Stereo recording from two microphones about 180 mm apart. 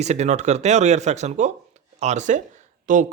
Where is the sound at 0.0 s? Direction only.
40° right (ahead or behind).